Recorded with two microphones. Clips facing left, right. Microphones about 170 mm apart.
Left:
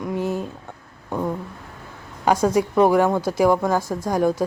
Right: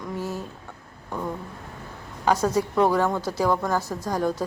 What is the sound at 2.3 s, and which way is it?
A woman's voice, 10° left (ahead or behind).